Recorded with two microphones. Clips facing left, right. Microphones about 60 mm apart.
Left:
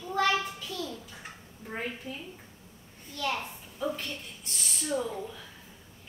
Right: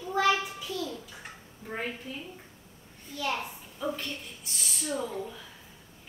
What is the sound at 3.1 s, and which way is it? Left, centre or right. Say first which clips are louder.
A woman's voice: even; centre.